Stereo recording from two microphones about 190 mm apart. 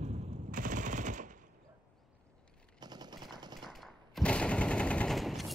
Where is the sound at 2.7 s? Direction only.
20° right (ahead or behind).